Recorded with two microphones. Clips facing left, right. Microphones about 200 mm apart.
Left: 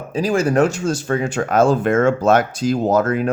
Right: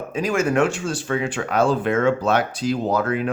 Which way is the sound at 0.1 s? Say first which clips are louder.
Left 3 dB; 35° left (ahead or behind).